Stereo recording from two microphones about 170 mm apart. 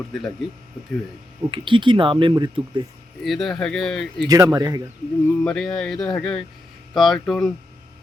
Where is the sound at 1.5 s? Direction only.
30° right (ahead or behind).